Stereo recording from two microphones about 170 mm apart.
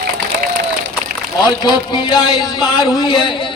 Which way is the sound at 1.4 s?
25° left (ahead or behind).